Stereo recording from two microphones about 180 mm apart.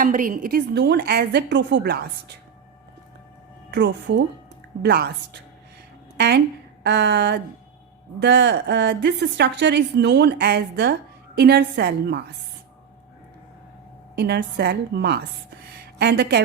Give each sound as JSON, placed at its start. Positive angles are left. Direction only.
{"t": 0.0, "sound": "a woman's voice", "side_deg": -45}
{"t": 3.7, "sound": "speech", "side_deg": -85}
{"t": 4.8, "sound": "a woman's voice", "side_deg": -65}
{"t": 14.2, "sound": "a woman's voice", "side_deg": -65}